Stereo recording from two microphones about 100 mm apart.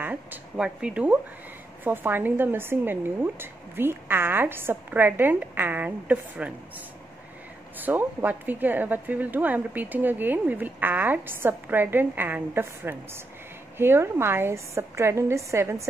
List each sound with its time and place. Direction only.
0.0 s a woman's voice: 15° right (ahead or behind)
7.7 s a woman's voice: 20° right (ahead or behind)